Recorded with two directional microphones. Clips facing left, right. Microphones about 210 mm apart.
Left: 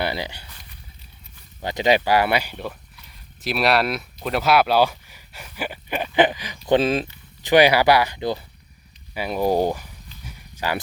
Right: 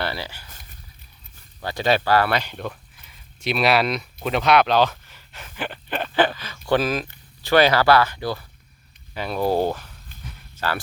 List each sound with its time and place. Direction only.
0.0 s speech: 15° left (ahead or behind)
1.6 s speech: 15° left (ahead or behind)
6.7 s speech: 25° left (ahead or behind)
7.4 s speech: 15° left (ahead or behind)
10.2 s walk: 10° left (ahead or behind)